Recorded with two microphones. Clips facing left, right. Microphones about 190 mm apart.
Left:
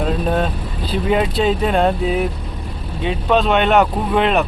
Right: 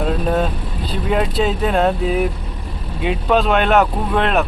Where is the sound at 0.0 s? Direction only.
Centre (ahead or behind).